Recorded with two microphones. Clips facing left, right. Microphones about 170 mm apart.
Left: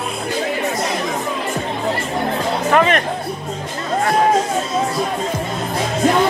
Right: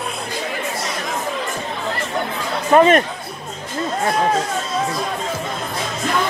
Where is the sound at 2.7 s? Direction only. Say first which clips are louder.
Right 4 dB; 35° right (ahead or behind).